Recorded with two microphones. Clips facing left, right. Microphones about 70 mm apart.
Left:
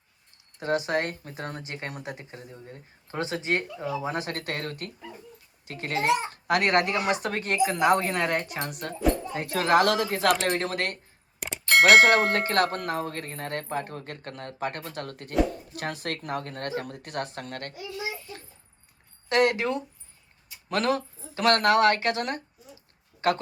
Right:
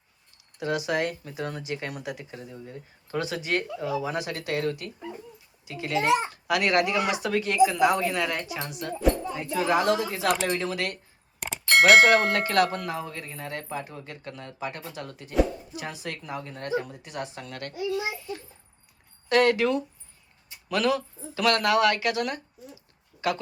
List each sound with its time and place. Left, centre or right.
0.6 s speech: left
9.3 s speech: left
11.3 s bicycle bell: centre
12.3 s speech: left
19.3 s speech: left
20.7 s speech: left
23.1 s a sound: centre